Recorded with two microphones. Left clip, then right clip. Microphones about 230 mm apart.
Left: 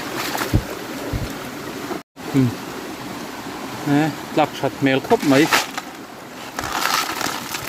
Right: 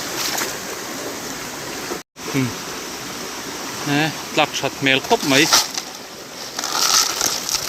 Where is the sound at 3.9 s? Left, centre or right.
Centre.